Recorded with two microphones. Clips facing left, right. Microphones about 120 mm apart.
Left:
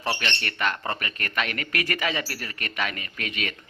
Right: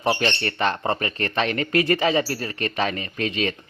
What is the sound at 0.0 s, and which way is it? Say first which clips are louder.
Speech: right 7 dB; 25° right (ahead or behind).